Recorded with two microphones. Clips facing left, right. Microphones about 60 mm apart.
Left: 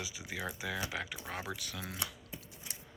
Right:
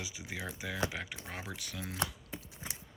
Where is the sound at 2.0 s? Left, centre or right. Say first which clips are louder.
Right 5 dB; right.